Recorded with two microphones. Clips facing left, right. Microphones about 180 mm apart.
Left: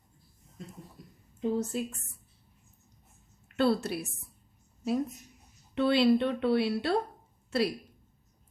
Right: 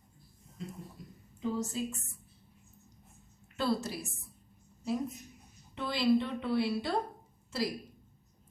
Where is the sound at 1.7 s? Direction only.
65° left (ahead or behind).